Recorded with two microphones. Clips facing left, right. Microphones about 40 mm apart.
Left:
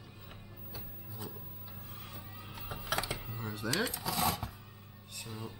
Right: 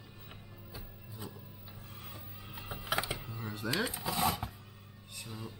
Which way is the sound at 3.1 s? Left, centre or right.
Centre.